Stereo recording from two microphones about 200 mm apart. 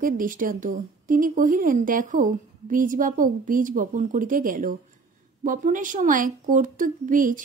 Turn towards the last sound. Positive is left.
turn(degrees=-40)  # may be behind; listen again after turning